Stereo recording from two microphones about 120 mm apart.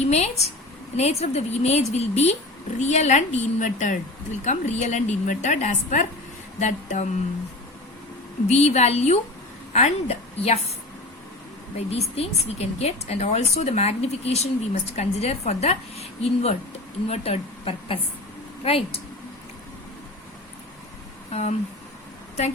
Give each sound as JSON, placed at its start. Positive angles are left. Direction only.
{"t": 0.0, "sound": "a woman's voice", "side_deg": 65}
{"t": 8.4, "sound": "speech", "side_deg": 65}
{"t": 11.8, "sound": "speech", "side_deg": 60}
{"t": 21.3, "sound": "speech", "side_deg": 60}